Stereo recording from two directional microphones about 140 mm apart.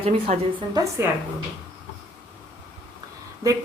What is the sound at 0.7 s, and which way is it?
Speech, 25° right (ahead or behind).